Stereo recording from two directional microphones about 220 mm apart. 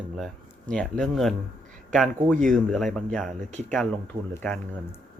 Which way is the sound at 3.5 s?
30° right (ahead or behind).